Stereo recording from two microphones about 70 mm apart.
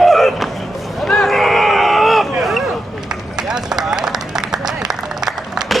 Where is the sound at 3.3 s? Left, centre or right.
Centre.